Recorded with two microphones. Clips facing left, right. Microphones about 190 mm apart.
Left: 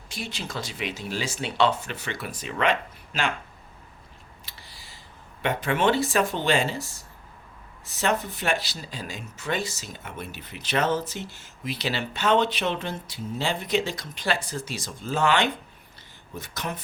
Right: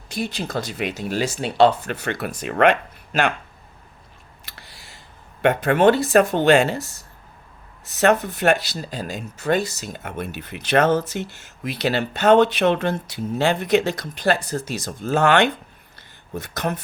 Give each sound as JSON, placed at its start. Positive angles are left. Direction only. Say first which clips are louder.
{"t": 0.2, "sound": "speech", "louder": "right 8 dB", "side_deg": -40}
{"t": 0.5, "sound": "speech", "louder": "right 6 dB", "side_deg": -50}
{"t": 1.9, "sound": "speech", "louder": "right 7 dB", "side_deg": -60}
{"t": 4.4, "sound": "a sound", "louder": "right 6 dB", "side_deg": -70}
{"t": 5.4, "sound": "speech", "louder": "right 8 dB", "side_deg": -60}
{"t": 5.7, "sound": "speech", "louder": "right 7 dB", "side_deg": -45}
{"t": 6.0, "sound": "speech", "louder": "right 7 dB", "side_deg": -65}
{"t": 8.9, "sound": "speech", "louder": "right 7 dB", "side_deg": -50}
{"t": 12.4, "sound": "speech", "louder": "right 9 dB", "side_deg": -60}
{"t": 14.2, "sound": "speech", "louder": "right 7 dB", "side_deg": -45}
{"t": 15.1, "sound": "speech", "louder": "right 6 dB", "side_deg": -65}
{"t": 16.0, "sound": "a sound", "louder": "right 7 dB", "side_deg": -60}